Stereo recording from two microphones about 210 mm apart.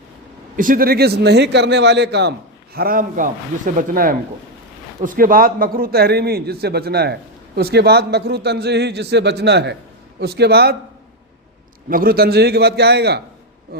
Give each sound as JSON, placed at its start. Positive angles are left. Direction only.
{"t": 0.5, "sound": "a man's voice", "side_deg": -40}
{"t": 2.7, "sound": "a man's voice", "side_deg": -45}
{"t": 11.9, "sound": "a man's voice", "side_deg": -45}